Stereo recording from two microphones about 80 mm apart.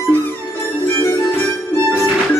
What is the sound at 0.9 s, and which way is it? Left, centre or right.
Music, left.